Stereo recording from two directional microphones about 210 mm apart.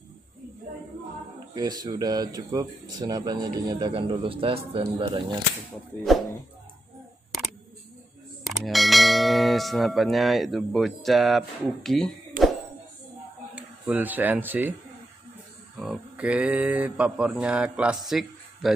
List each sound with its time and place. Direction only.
1.5 s speech: 20° right (ahead or behind)
8.5 s bell: centre (ahead or behind)
13.6 s speech: 5° right (ahead or behind)
15.8 s speech: 5° right (ahead or behind)